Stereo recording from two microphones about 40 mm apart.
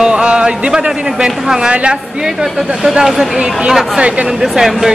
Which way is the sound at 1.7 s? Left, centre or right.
Right.